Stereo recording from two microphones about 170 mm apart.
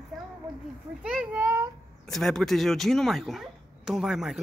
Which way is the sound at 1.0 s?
5° right (ahead or behind).